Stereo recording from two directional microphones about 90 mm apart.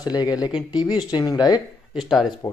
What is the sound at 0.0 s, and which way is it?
Speech, 50° left (ahead or behind).